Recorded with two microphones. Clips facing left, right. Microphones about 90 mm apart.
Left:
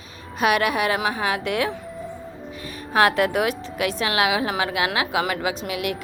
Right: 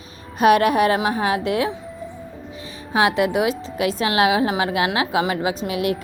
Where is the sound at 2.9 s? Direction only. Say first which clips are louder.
Even; 20° right (ahead or behind).